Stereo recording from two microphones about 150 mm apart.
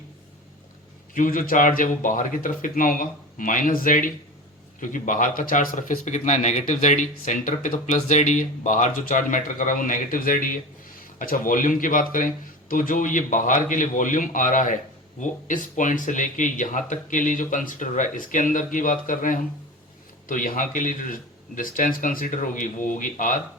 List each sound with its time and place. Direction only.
1.1 s speech: 65° left (ahead or behind)